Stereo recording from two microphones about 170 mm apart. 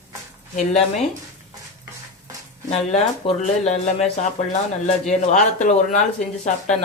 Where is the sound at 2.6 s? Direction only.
40° left (ahead or behind).